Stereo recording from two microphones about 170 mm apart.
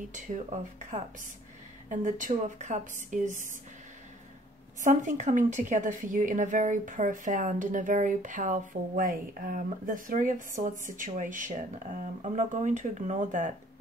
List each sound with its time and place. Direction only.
0.1 s a woman's voice: 45° right (ahead or behind)
4.8 s a woman's voice: 45° right (ahead or behind)